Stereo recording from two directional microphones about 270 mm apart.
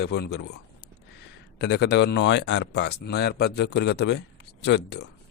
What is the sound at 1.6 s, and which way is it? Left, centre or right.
Speech, left.